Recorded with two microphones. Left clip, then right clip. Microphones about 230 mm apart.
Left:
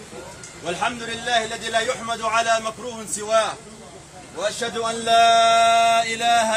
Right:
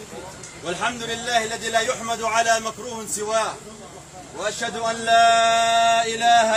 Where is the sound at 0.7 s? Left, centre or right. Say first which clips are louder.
Even; centre.